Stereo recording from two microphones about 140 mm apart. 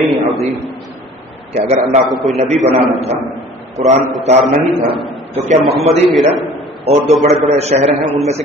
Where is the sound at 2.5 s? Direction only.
55° right (ahead or behind).